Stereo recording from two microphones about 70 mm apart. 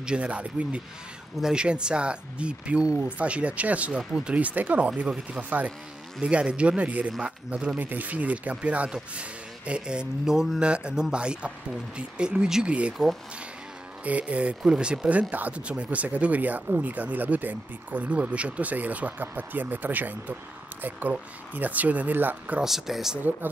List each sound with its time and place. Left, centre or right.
0.0 s speech: centre
14.0 s speech: centre
22.6 s speech: centre